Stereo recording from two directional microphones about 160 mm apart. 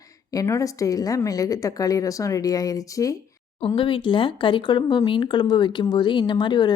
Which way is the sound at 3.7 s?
30° left (ahead or behind).